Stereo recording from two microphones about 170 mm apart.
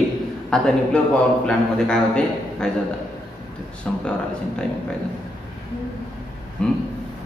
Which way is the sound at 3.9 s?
5° left (ahead or behind).